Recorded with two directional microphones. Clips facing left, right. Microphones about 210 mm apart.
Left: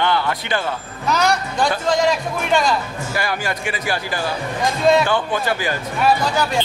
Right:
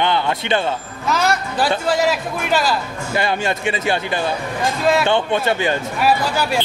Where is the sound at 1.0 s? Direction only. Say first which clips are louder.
Left 1 dB; centre (ahead or behind).